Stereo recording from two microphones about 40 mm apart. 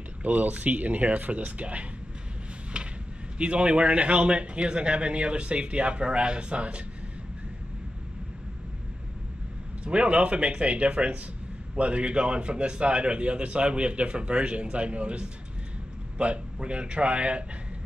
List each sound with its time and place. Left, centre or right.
0.2 s speech: right
2.8 s a sound: right
3.3 s a man's voice: right
9.8 s a man's voice: right